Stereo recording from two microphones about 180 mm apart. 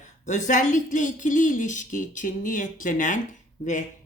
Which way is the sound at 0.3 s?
45° left (ahead or behind).